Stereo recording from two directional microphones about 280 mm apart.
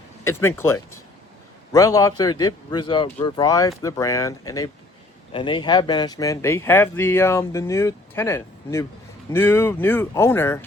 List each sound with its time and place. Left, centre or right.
0.3 s speech: centre